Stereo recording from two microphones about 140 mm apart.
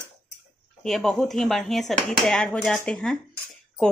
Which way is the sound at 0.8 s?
Centre (ahead or behind).